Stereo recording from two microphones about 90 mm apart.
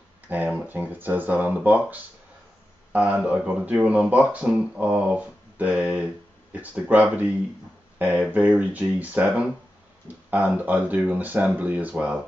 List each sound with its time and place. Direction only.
0.3 s speech: 20° right (ahead or behind)